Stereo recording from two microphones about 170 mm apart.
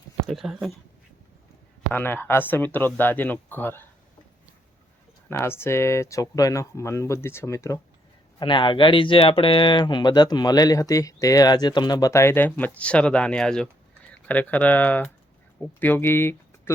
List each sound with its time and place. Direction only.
0.3 s speech: centre (ahead or behind)
1.9 s speech: 10° left (ahead or behind)
5.3 s speech: 15° left (ahead or behind)
8.4 s speech: 30° left (ahead or behind)